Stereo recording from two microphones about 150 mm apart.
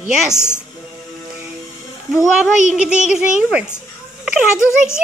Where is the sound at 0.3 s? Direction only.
15° left (ahead or behind).